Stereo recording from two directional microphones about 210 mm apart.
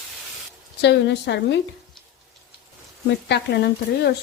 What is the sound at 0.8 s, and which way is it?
Speech, 55° left (ahead or behind).